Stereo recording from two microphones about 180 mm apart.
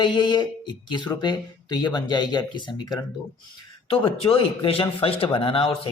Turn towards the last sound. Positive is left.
turn(degrees=30)  # may be behind; listen again after turning